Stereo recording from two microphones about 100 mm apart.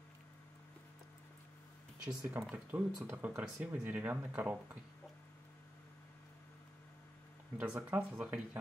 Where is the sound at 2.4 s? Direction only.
20° right (ahead or behind).